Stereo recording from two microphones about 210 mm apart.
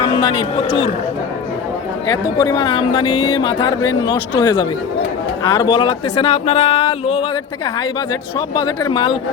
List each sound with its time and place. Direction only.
0.0 s speech: 25° left (ahead or behind)
2.0 s speech: 20° left (ahead or behind)
8.5 s speech: 20° left (ahead or behind)